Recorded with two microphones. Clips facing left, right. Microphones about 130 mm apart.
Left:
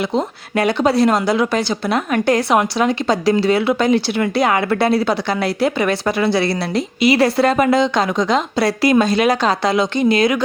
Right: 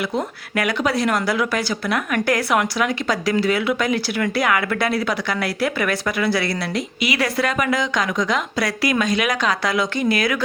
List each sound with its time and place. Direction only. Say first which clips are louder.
0.1 s speech: left 4 dB; 25° left (ahead or behind)